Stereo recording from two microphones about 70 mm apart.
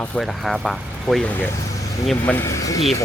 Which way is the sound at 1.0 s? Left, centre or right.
Centre.